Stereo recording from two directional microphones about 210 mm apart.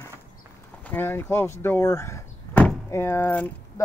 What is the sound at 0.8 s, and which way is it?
Speech, 10° left (ahead or behind).